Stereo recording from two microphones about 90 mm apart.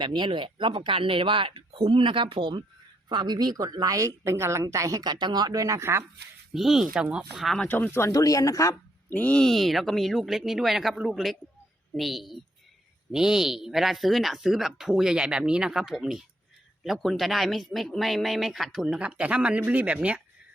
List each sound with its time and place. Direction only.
0.0 s speech: 65° right (ahead or behind)
3.1 s a woman's voice: 55° right (ahead or behind)
5.1 s a woman's voice: 55° right (ahead or behind)
5.6 s speech: 30° right (ahead or behind)
6.5 s speech: centre (ahead or behind)
7.4 s speech: 5° left (ahead or behind)
7.7 s speech: 20° left (ahead or behind)
8.1 s speech: 40° left (ahead or behind)
9.0 s speech: 20° left (ahead or behind); by 20.2 s 15° right (ahead or behind)